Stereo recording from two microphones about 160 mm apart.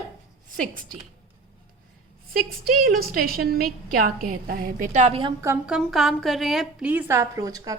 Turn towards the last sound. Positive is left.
turn(degrees=-20)  # may be behind; listen again after turning